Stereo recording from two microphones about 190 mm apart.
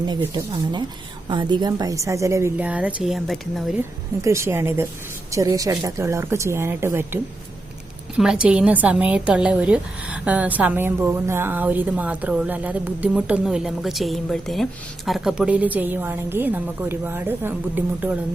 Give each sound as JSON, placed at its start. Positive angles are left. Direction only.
{"t": 0.2, "sound": "a woman's voice", "side_deg": -20}
{"t": 3.8, "sound": "a woman's voice", "side_deg": -15}